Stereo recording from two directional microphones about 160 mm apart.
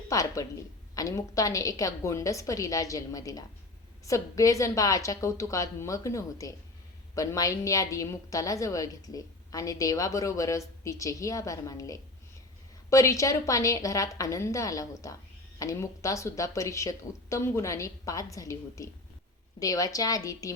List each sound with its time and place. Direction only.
0.1 s a woman's voice: 20° left (ahead or behind)